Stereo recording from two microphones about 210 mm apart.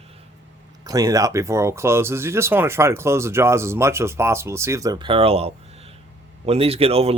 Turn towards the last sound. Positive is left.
turn(degrees=-30)  # may be behind; listen again after turning